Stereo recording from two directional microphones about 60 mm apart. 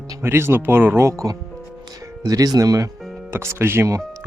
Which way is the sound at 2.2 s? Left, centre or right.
Right.